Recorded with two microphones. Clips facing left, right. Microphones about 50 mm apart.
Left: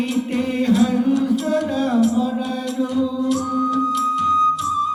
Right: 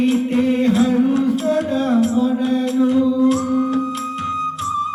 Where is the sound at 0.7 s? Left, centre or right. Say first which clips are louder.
Right 2 dB; right.